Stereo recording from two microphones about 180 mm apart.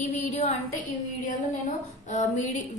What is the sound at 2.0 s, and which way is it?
Speech, 40° left (ahead or behind).